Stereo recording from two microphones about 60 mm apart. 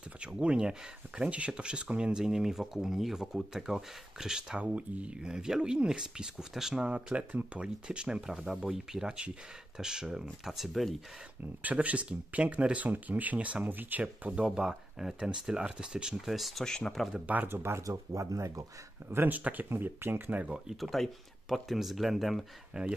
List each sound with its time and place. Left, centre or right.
0.2 s speech: centre
6.8 s speech: centre
11.6 s speech: right
14.3 s speech: centre
16.6 s speech: centre
17.5 s speech: right
17.8 s speech: right
19.0 s speech: right
20.4 s speech: centre
20.8 s speech: centre